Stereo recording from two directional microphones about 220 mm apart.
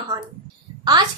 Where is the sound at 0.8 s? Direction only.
20° right (ahead or behind).